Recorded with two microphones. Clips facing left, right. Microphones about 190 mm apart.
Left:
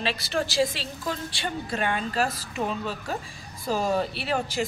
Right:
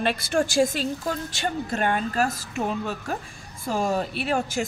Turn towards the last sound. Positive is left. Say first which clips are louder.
# right 2 dB
turn(degrees=-50)  # may be behind; listen again after turning